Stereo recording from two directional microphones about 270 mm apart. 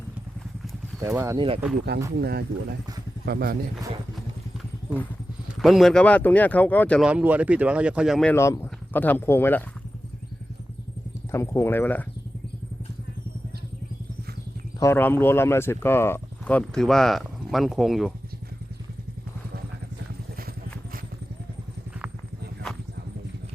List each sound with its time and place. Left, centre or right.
1.0 s speech: centre
2.1 s speech: right
5.6 s speech: centre
11.3 s speech: centre
14.8 s speech: centre